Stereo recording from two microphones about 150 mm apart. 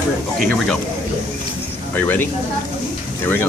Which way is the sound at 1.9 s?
15° left (ahead or behind).